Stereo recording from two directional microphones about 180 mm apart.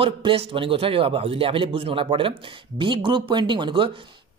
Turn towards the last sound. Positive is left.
turn(degrees=-25)  # may be behind; listen again after turning